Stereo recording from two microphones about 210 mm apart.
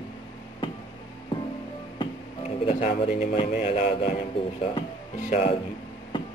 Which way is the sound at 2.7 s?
30° left (ahead or behind).